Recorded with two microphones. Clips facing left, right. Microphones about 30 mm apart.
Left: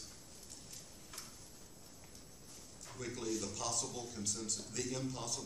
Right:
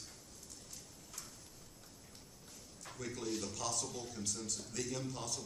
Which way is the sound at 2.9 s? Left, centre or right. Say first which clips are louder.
Even; centre.